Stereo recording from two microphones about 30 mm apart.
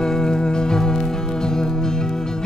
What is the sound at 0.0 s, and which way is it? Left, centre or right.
Music, left.